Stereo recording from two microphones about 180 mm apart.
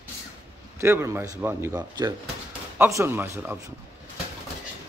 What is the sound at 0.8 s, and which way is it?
A man's voice, 15° right (ahead or behind).